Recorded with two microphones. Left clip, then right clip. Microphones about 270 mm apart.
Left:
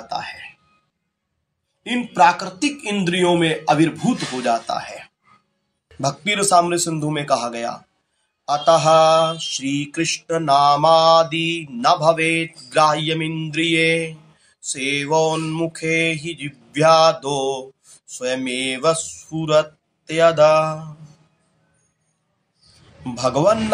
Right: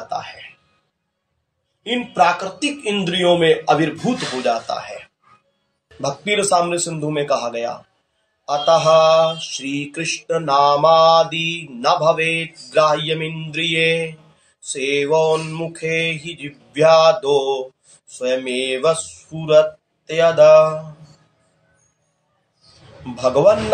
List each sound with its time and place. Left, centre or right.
1.8 s mantra: left
5.9 s mantra: left
23.1 s mantra: left